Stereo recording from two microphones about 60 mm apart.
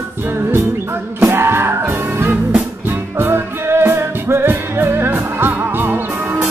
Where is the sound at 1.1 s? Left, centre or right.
Right.